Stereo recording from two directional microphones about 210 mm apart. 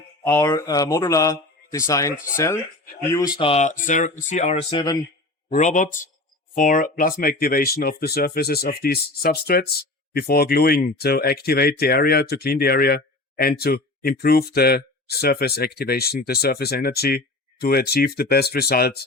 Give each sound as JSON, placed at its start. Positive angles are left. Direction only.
{"t": 0.3, "sound": "a man's voice", "side_deg": 15}
{"t": 4.7, "sound": "speech", "side_deg": 20}
{"t": 5.5, "sound": "speech", "side_deg": 35}